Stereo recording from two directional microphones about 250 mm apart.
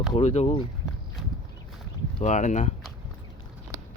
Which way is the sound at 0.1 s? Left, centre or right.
Left.